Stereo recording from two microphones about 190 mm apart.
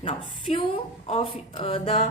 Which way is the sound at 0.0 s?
25° left (ahead or behind).